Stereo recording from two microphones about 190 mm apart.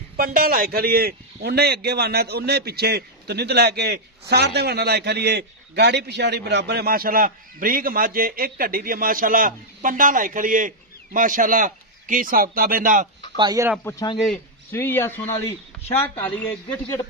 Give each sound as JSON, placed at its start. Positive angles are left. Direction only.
{"t": 0.2, "sound": "a man's voice", "side_deg": -50}
{"t": 13.3, "sound": "speech", "side_deg": -20}
{"t": 13.8, "sound": "a man's voice", "side_deg": 20}